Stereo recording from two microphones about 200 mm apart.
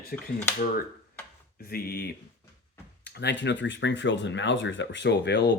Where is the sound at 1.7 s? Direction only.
50° left (ahead or behind).